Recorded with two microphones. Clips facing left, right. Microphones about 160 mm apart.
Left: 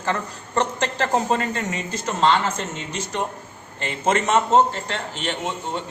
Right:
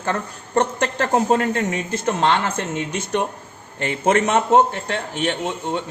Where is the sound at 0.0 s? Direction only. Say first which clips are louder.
Right 1 dB; 50° right (ahead or behind).